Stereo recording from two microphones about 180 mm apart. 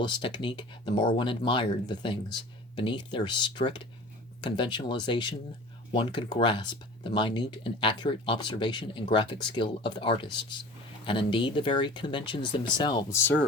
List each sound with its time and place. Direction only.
0.0 s speech: 25° left (ahead or behind)